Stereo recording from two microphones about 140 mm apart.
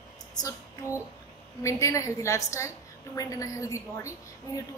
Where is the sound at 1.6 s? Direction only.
20° left (ahead or behind).